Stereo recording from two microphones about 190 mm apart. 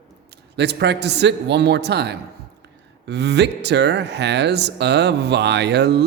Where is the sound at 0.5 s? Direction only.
60° right (ahead or behind).